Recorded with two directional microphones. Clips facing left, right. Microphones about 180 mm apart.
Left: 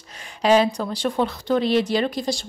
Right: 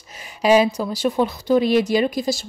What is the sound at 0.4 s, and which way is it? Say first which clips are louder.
A woman's voice: right 2 dB; 10° right (ahead or behind).